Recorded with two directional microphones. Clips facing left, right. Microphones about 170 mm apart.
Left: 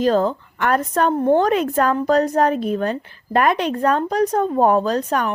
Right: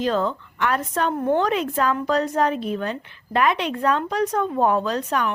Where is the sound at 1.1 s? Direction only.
35° left (ahead or behind).